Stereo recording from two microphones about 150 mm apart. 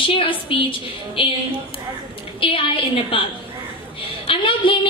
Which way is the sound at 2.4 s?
35° left (ahead or behind).